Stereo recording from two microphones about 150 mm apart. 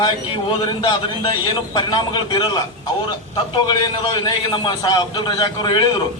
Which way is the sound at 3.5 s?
30° left (ahead or behind).